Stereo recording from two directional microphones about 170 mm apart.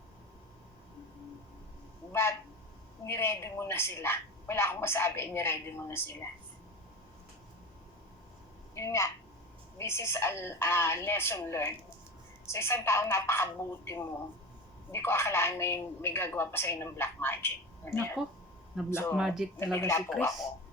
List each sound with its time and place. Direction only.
3.1 s a woman's voice: 15° left (ahead or behind)
8.7 s a woman's voice: 15° left (ahead or behind)
18.2 s speech: centre (ahead or behind)
18.9 s a woman's voice: 15° left (ahead or behind)
19.1 s speech: centre (ahead or behind)
19.5 s a woman's voice: 15° left (ahead or behind)